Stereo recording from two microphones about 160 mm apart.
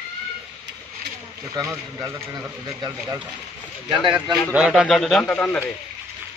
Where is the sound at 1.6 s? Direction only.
20° right (ahead or behind).